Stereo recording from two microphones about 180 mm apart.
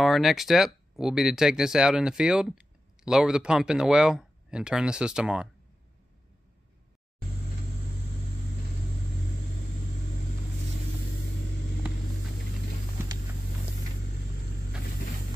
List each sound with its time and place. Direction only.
0.0 s speech: centre (ahead or behind)